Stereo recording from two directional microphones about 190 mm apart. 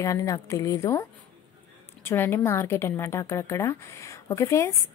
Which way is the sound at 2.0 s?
10° left (ahead or behind).